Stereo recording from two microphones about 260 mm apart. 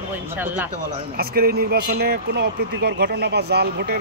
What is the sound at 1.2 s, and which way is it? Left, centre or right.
Speech, right.